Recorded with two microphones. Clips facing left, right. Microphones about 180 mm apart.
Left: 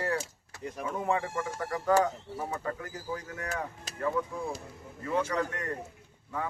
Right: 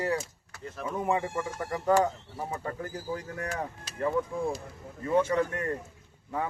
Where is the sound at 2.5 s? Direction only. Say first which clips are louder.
Right 1 dB; 30° right (ahead or behind).